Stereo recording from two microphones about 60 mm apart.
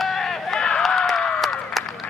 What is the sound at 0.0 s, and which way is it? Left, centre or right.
Run, centre.